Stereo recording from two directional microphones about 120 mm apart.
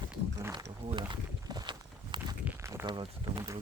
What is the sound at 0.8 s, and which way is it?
Speech, 60° right (ahead or behind).